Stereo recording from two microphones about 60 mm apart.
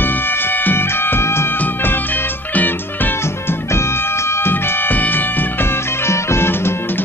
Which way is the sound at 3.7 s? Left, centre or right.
Left.